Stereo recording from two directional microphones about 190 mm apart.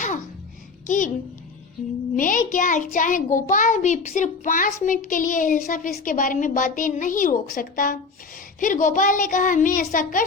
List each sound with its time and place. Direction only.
0.9 s a child's voice: 45° left (ahead or behind)
2.1 s a child's voice: 45° left (ahead or behind)